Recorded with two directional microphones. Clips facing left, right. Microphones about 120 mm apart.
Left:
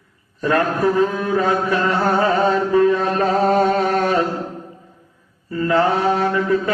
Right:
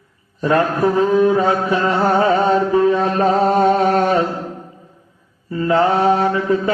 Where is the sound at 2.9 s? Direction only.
25° right (ahead or behind).